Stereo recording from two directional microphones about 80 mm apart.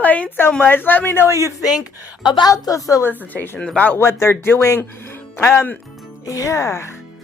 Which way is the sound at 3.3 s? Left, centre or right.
Left.